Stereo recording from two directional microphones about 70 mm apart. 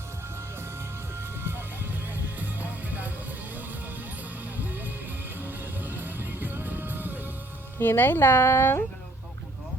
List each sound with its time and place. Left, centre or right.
1.2 s music: right
4.6 s music: right
7.8 s speech: left